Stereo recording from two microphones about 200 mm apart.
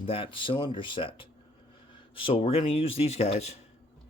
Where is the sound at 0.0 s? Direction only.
25° left (ahead or behind).